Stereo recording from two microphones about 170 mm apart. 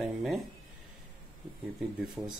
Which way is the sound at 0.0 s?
Centre (ahead or behind).